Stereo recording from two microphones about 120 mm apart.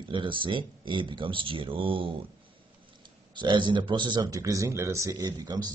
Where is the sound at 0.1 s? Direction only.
45° right (ahead or behind).